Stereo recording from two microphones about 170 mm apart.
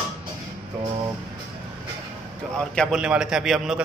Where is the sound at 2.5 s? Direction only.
5° left (ahead or behind).